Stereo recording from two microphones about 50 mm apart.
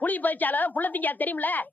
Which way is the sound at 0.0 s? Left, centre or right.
Left.